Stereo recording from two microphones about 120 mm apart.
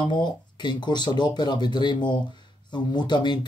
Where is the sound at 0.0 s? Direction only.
40° left (ahead or behind).